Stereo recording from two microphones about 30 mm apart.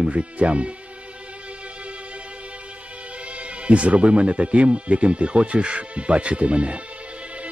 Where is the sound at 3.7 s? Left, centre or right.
Right.